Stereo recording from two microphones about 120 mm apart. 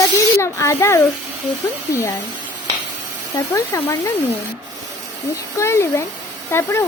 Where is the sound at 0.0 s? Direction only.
25° left (ahead or behind).